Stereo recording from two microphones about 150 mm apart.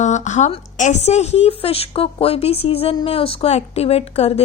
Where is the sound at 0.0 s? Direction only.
50° left (ahead or behind).